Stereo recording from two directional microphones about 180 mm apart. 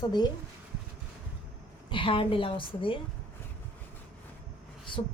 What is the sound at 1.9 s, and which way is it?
A woman's voice, 30° left (ahead or behind).